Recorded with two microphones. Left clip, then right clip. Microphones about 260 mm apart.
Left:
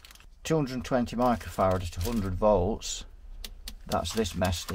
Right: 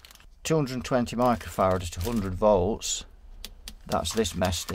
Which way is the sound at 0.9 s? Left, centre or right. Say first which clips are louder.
Right 2 dB; right.